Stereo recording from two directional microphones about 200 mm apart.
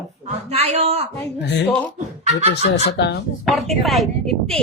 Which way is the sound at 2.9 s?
55° left (ahead or behind).